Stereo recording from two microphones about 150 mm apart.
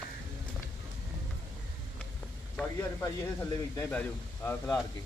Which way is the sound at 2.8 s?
20° left (ahead or behind).